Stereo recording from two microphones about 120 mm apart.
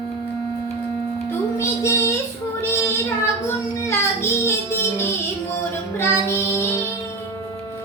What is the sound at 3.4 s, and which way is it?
Music, 20° left (ahead or behind).